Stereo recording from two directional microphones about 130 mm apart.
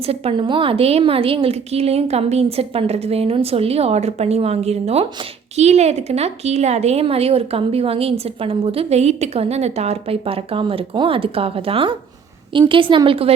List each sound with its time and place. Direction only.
0.0 s a woman's voice: 50° right (ahead or behind)